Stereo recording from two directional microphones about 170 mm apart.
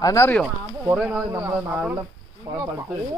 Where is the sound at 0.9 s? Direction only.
5° right (ahead or behind).